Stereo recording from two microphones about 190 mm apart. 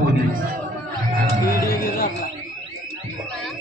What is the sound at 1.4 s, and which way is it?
Speech, 50° left (ahead or behind).